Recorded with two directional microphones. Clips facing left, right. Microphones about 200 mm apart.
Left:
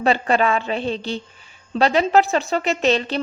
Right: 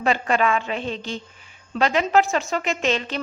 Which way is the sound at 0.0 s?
35° left (ahead or behind).